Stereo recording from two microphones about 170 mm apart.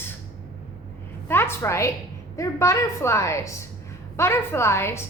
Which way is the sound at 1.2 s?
15° left (ahead or behind).